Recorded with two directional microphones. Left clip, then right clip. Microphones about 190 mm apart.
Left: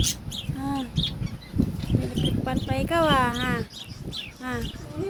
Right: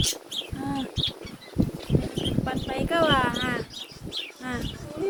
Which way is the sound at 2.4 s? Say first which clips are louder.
Left 1 dB; 40° left (ahead or behind).